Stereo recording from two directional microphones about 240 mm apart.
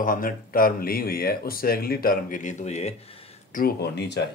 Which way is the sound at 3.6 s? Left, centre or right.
Left.